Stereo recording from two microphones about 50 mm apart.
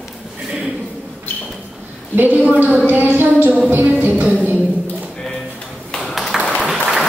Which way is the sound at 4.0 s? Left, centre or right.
Right.